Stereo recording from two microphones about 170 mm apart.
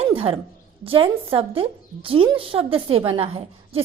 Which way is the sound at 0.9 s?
30° right (ahead or behind).